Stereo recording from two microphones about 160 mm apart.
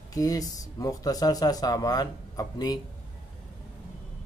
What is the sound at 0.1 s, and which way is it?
Speech, 20° left (ahead or behind).